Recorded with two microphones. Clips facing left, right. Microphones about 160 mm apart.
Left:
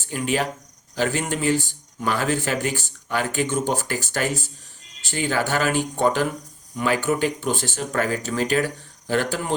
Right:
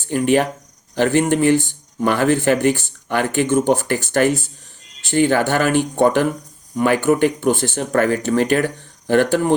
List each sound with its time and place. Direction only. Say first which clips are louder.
0.1 s speech: right 8 dB; 55° right (ahead or behind)